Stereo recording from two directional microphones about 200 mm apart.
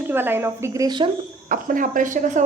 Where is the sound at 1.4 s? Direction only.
40° right (ahead or behind).